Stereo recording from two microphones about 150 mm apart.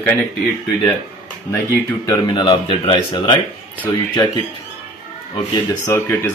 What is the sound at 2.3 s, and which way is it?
Speech, 35° left (ahead or behind).